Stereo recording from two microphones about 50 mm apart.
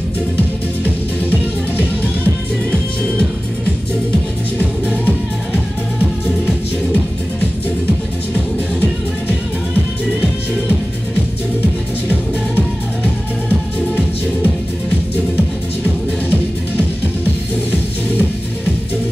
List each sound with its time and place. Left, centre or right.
0.8 s music: right
2.7 s music: centre
13.0 s music: right